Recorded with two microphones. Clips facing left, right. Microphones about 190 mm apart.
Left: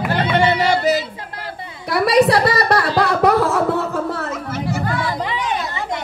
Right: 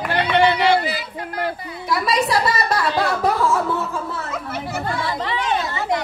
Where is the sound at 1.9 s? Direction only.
65° left (ahead or behind).